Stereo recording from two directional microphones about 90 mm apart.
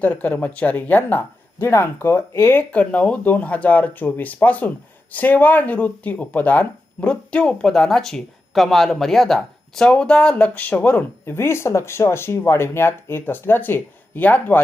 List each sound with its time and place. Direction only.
0.0 s speech: 20° left (ahead or behind)
11.3 s speech: 30° left (ahead or behind)